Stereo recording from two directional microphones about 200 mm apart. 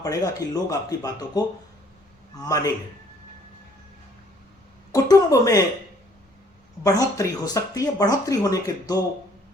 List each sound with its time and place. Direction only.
0.0 s speech: 15° left (ahead or behind)
4.9 s speech: 15° left (ahead or behind)
6.8 s speech: 15° left (ahead or behind)